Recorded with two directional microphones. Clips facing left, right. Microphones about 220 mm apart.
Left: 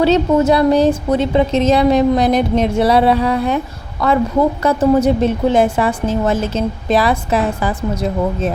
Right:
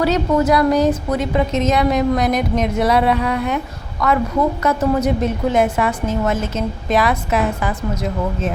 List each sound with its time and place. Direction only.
0.0 s a woman's voice: 25° left (ahead or behind)